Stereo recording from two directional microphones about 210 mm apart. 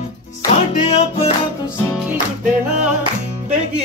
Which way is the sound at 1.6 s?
5° right (ahead or behind).